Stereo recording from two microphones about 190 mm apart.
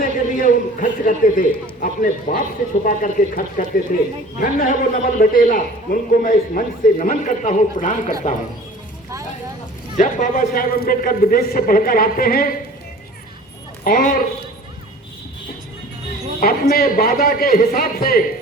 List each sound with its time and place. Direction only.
0.0 s a sound: 45° left (ahead or behind)
1.8 s a man's voice: 45° left (ahead or behind)
10.0 s a man's voice: 40° left (ahead or behind)
13.8 s a man's voice: 45° left (ahead or behind)
16.4 s a man's voice: 50° left (ahead or behind)